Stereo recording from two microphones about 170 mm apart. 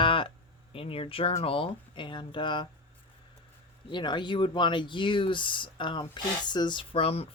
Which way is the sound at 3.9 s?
25° left (ahead or behind).